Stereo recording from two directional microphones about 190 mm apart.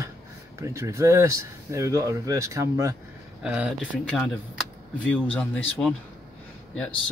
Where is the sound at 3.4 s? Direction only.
5° right (ahead or behind).